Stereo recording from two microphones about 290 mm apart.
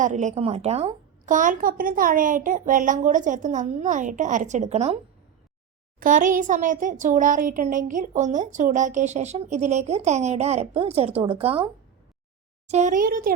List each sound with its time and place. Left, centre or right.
0.0 s a child's voice: right
6.0 s a child's voice: right